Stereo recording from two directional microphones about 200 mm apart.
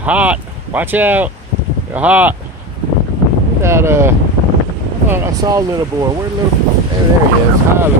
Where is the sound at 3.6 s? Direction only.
15° right (ahead or behind).